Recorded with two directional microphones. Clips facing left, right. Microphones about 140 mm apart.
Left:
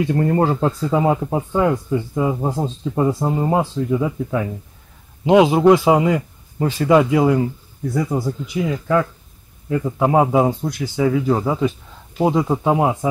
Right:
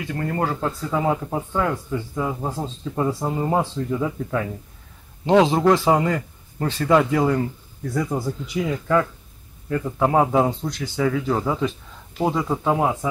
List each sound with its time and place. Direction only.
0.0 s speech: 25° left (ahead or behind)